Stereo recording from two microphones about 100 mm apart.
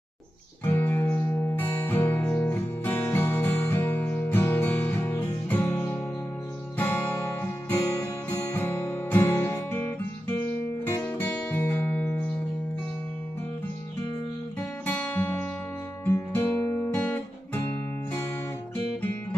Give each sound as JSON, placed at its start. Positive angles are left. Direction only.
{"t": 0.6, "sound": "music", "side_deg": 20}
{"t": 8.5, "sound": "guitar", "side_deg": 25}
{"t": 11.0, "sound": "music", "side_deg": 15}
{"t": 14.8, "sound": "guitar", "side_deg": 15}
{"t": 16.6, "sound": "music", "side_deg": 30}
{"t": 16.9, "sound": "guitar", "side_deg": 15}